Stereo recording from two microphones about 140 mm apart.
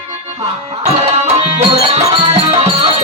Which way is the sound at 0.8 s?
45° right (ahead or behind).